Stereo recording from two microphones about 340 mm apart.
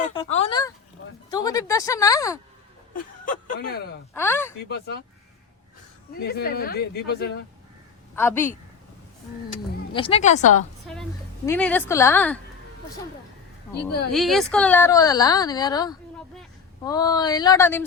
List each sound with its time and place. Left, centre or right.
0.1 s speech: centre
2.9 s speech: left
4.1 s speech: centre
4.7 s speech: left
6.1 s speech: left
8.1 s speech: centre
9.9 s speech: centre
10.9 s a woman's voice: centre
14.1 s speech: centre